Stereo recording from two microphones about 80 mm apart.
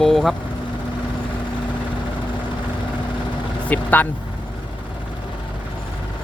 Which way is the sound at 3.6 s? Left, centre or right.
Left.